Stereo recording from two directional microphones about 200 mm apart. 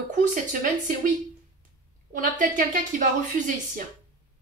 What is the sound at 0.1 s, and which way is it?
Speech, 40° right (ahead or behind).